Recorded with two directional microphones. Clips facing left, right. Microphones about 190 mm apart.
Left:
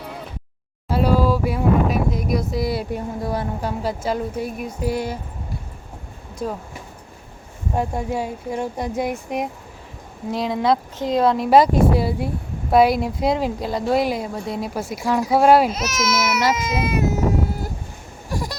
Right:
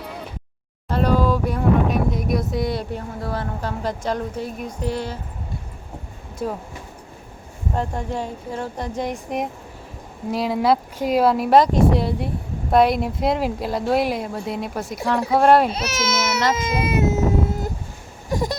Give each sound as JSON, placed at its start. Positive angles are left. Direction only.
{"t": 0.0, "sound": "a sound", "side_deg": 0}
{"t": 0.9, "sound": "speech", "side_deg": 5}
{"t": 6.4, "sound": "speech", "side_deg": 0}
{"t": 7.8, "sound": "speech", "side_deg": 10}
{"t": 15.7, "sound": "speech", "side_deg": -30}
{"t": 16.6, "sound": "baby cry", "side_deg": -30}
{"t": 18.3, "sound": "a sound", "side_deg": -20}